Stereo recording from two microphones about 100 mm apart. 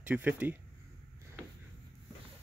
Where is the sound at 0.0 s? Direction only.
15° right (ahead or behind).